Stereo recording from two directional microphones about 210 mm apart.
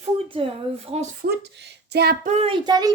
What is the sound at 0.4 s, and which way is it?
Speech, 25° right (ahead or behind).